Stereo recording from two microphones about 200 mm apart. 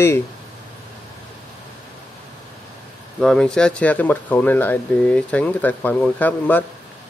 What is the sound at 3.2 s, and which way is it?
Speech, 5° left (ahead or behind).